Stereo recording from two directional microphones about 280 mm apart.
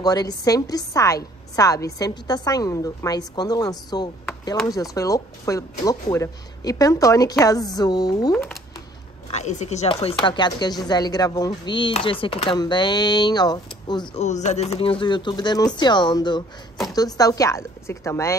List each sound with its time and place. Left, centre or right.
0.0 s a woman's voice: centre
8.3 s speech: centre
9.3 s a woman's voice: left
14.1 s a woman's voice: left